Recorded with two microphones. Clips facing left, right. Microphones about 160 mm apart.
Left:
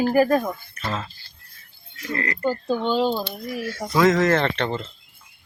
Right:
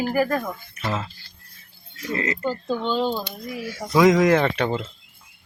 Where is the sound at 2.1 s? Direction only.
20° right (ahead or behind).